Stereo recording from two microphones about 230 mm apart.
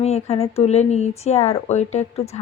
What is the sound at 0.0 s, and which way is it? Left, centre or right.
Speech, left.